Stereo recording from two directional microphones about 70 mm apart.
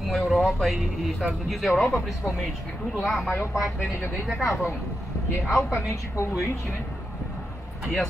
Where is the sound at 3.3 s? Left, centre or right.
Left.